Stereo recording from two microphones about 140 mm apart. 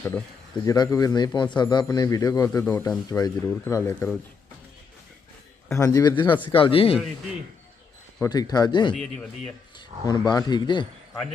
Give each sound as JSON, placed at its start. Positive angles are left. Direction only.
{"t": 0.0, "sound": "speech", "side_deg": 10}
{"t": 0.6, "sound": "speech", "side_deg": 25}
{"t": 5.6, "sound": "a man's voice", "side_deg": 20}
{"t": 8.2, "sound": "a man's voice", "side_deg": 30}